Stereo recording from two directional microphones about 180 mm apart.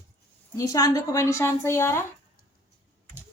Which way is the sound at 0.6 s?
20° left (ahead or behind).